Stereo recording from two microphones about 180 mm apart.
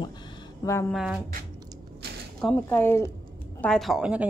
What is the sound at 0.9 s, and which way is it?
Speech, 5° right (ahead or behind).